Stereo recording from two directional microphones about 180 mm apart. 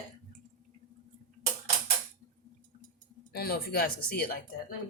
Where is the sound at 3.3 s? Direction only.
60° left (ahead or behind).